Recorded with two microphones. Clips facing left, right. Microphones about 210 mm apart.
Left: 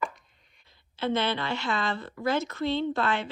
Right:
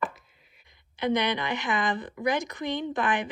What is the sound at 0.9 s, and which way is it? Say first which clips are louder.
Speech: right 1 dB; 15° right (ahead or behind).